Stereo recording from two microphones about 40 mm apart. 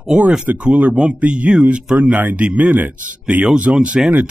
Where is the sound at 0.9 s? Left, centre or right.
Right.